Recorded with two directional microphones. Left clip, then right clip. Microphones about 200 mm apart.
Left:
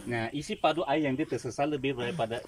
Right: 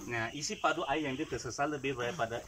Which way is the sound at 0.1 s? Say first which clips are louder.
Left 3 dB; 50° left (ahead or behind).